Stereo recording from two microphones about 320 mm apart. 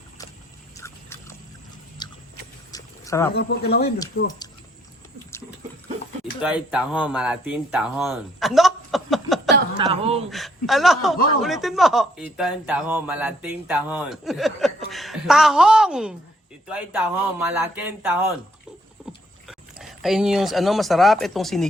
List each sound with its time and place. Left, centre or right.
0.8 s dog: centre
2.0 s biting: centre
2.7 s a sound: centre
3.3 s speech: left
4.1 s speech: left
6.4 s speech: centre
9.7 s speech: centre
10.2 s speech: centre
19.5 s speech: centre